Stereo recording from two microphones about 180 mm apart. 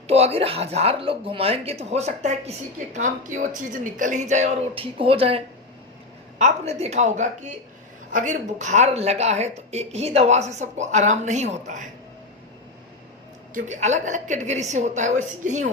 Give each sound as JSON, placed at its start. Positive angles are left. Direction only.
{"t": 0.1, "sound": "speech", "side_deg": -35}
{"t": 6.4, "sound": "speech", "side_deg": -35}
{"t": 13.5, "sound": "speech", "side_deg": -45}